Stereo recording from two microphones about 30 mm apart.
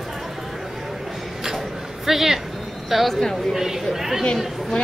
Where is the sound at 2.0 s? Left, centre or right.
Centre.